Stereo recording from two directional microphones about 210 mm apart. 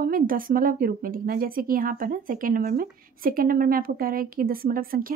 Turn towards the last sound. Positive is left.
turn(degrees=-45)  # may be behind; listen again after turning